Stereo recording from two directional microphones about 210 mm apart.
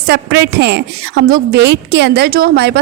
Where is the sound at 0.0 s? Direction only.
50° right (ahead or behind).